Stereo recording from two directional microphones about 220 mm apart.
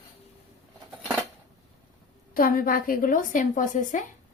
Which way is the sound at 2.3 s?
40° left (ahead or behind).